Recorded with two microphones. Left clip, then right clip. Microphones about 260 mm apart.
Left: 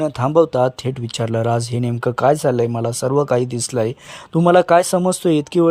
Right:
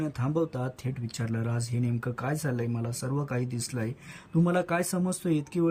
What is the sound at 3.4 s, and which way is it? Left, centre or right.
Speech, centre.